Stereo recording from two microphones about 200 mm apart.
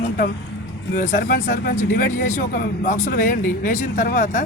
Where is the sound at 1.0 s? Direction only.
40° left (ahead or behind).